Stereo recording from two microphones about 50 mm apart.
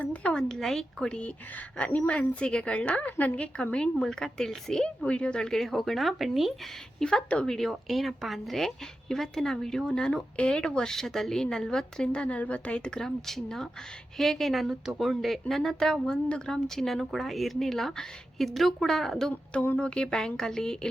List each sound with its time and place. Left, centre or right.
0.0 s a woman's voice: left
0.3 s speech: centre
1.0 s a woman's voice: centre
5.0 s a woman's voice: left; by 6.5 s centre
7.0 s speech: centre
7.5 s speech: centre; by 13.0 s left
13.0 s a woman's voice: centre
19.8 s speech: centre